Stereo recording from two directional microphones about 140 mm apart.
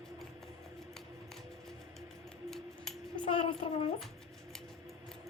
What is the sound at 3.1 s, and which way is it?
Child singing, 35° left (ahead or behind).